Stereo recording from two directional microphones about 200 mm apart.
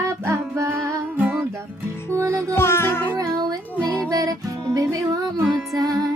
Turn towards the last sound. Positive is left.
turn(degrees=-20)  # may be behind; listen again after turning